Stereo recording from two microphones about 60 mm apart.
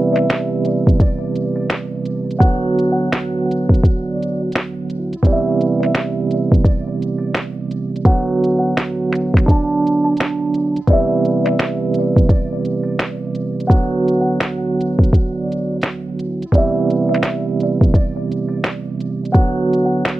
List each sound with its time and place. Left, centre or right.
0.1 s music: centre
2.3 s music: centre
5.4 s music: centre
8.0 s music: centre
13.7 s music: centre
16.5 s music: centre
19.3 s music: centre